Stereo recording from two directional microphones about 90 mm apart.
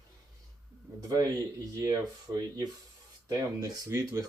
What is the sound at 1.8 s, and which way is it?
Speech, 40° right (ahead or behind).